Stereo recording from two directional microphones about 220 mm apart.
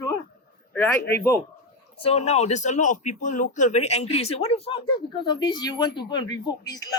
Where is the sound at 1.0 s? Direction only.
50° left (ahead or behind).